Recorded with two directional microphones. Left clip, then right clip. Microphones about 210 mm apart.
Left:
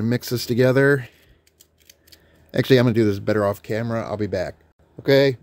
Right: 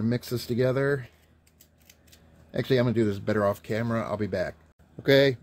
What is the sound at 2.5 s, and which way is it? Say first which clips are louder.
Speech: left 8 dB; 40° left (ahead or behind).